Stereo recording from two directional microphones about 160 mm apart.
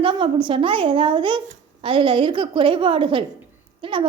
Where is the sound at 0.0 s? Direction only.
30° right (ahead or behind).